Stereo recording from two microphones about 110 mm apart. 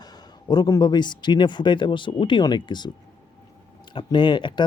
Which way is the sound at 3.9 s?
45° left (ahead or behind).